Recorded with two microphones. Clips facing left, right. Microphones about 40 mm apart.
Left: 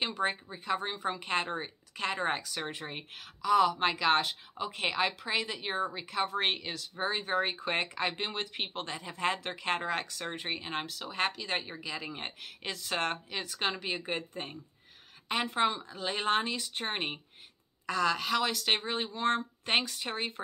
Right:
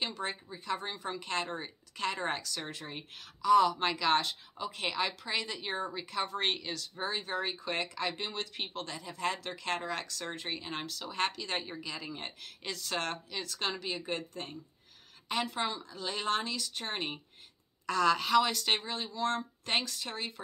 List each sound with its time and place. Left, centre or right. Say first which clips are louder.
0.0 s speech: left 5 dB; left
3.4 s speech: right 1 dB; centre
12.0 s speech: left 2 dB; left
17.8 s a woman's voice: right 1 dB; centre
18.9 s speech: left 3 dB; left
19.6 s speech: left 3 dB; left